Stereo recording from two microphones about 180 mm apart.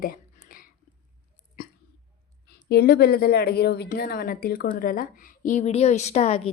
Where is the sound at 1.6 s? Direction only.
55° left (ahead or behind).